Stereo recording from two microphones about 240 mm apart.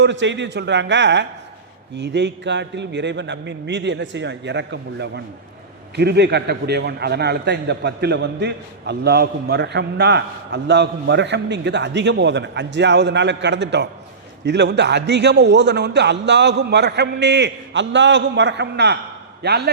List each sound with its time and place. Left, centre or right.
0.0 s a man's voice: right